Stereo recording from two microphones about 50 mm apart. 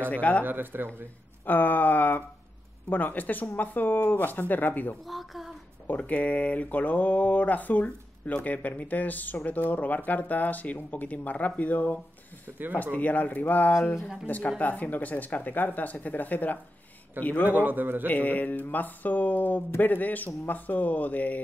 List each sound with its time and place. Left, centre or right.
0.1 s speech: left
0.4 s speech: right
1.4 s speech: left
5.1 s speech: centre
5.9 s speech: left
17.4 s a man's voice: right
18.0 s speech: left